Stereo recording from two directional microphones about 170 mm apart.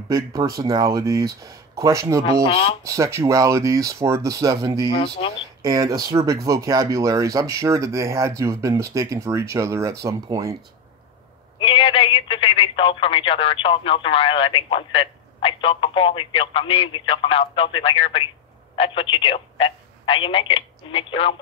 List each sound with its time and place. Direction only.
0.1 s speech: 20° right (ahead or behind)
2.4 s speech: 35° left (ahead or behind)
2.8 s speech: 20° right (ahead or behind)
4.8 s speech: 30° left (ahead or behind)
5.6 s speech: 20° right (ahead or behind)
11.6 s speech: 35° left (ahead or behind)